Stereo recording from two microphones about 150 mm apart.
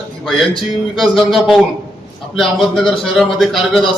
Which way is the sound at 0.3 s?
Centre (ahead or behind).